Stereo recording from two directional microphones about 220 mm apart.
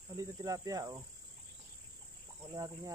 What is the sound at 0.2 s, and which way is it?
Speech, 15° right (ahead or behind).